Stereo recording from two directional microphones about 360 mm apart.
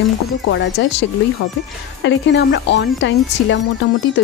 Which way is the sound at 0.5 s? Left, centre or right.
Left.